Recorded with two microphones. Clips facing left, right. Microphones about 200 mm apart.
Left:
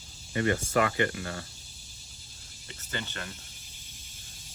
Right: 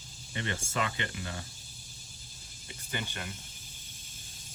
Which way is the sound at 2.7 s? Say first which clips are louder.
Left 1 dB; 15° right (ahead or behind).